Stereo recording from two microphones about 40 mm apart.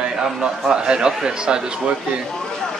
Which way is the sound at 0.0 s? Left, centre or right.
Centre.